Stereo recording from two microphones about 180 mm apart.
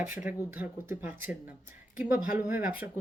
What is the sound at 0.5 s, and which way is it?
Speech, 10° right (ahead or behind).